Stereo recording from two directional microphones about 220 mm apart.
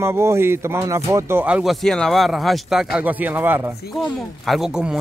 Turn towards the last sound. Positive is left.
turn(degrees=-5)  # may be behind; listen again after turning